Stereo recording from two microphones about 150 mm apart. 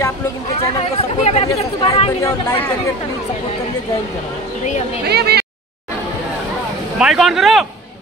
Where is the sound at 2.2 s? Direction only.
15° left (ahead or behind).